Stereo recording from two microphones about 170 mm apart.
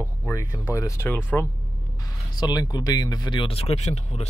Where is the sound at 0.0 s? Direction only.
15° left (ahead or behind).